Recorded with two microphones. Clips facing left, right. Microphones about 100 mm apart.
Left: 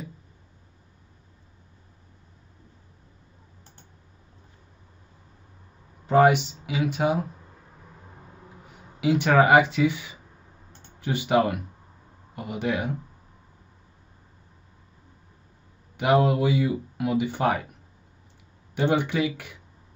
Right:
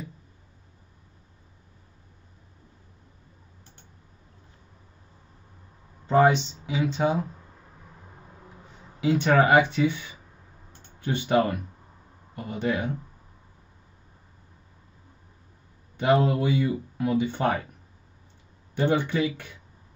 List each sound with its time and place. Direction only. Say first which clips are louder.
6.0 s speech: left 1 dB; 10° left (ahead or behind)
8.6 s speech: left 1 dB; 15° left (ahead or behind)
16.0 s speech: left 1 dB; 15° left (ahead or behind)
18.8 s speech: left 1 dB; 15° left (ahead or behind)